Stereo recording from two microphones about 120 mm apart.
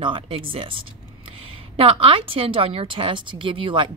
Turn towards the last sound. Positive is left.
turn(degrees=-45)  # may be behind; listen again after turning